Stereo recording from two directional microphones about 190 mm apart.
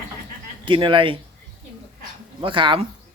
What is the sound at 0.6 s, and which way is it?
Speech, 25° right (ahead or behind).